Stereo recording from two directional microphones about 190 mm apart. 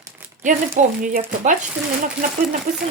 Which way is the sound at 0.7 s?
45° right (ahead or behind).